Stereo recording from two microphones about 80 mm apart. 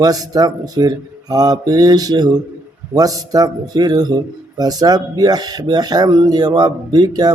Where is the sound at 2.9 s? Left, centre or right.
Right.